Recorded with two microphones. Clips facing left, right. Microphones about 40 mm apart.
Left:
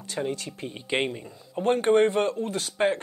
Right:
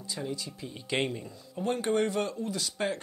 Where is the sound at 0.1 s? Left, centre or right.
Left.